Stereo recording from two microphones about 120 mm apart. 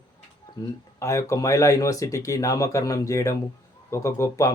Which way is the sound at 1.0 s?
25° left (ahead or behind).